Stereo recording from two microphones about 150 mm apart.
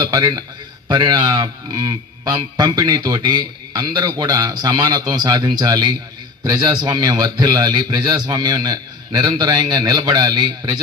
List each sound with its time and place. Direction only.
0.0 s speech: 25° right (ahead or behind)